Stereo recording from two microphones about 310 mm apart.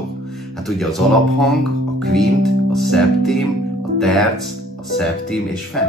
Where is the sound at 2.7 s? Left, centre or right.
Centre.